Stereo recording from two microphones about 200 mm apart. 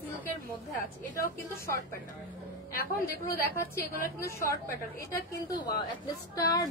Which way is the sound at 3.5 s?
15° left (ahead or behind).